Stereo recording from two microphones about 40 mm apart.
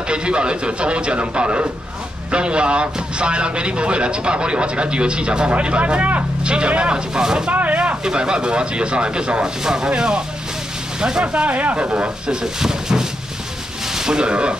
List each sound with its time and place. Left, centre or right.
0.1 s speech: right
7.5 s speech: right
8.0 s speech: right
11.4 s speech: right
12.5 s speech: centre